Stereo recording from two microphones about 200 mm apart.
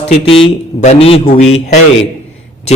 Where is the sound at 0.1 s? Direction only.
25° left (ahead or behind).